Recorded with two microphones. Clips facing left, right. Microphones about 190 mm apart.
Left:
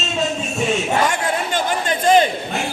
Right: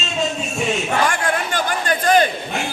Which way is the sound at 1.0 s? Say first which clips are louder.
Even; 20° left (ahead or behind).